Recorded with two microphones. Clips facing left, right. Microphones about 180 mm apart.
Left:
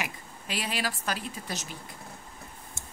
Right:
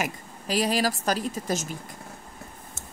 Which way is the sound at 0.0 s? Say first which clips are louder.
Right 6 dB; 40° right (ahead or behind).